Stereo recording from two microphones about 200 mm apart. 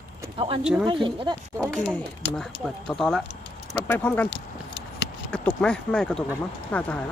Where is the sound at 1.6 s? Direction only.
5° left (ahead or behind).